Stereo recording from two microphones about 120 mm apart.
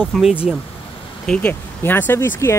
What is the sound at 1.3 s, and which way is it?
Speech, 15° left (ahead or behind).